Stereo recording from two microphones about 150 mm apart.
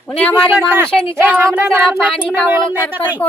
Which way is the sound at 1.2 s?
15° right (ahead or behind).